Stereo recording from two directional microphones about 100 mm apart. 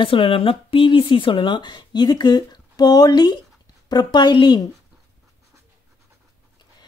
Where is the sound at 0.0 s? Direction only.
60° left (ahead or behind).